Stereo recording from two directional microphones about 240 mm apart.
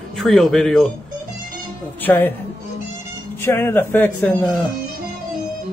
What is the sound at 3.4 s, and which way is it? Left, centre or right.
A man's voice, centre.